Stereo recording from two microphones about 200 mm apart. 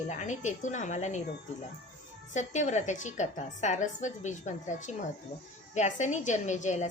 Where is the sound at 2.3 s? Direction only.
35° left (ahead or behind).